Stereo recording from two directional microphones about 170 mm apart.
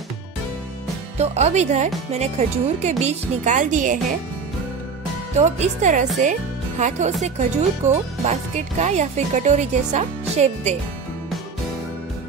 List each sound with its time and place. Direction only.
1.1 s speech: 40° right (ahead or behind)
5.3 s speech: 40° right (ahead or behind)